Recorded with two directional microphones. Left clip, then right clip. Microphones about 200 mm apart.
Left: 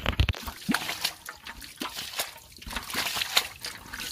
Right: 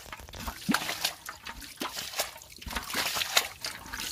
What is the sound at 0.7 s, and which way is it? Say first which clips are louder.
Liquid: left 1 dB; 40° right (ahead or behind).